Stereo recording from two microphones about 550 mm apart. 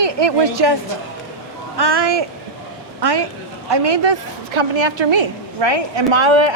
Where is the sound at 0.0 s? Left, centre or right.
Right.